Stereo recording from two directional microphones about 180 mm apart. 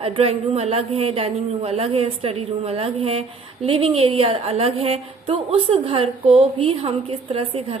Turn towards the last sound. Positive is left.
turn(degrees=-30)  # may be behind; listen again after turning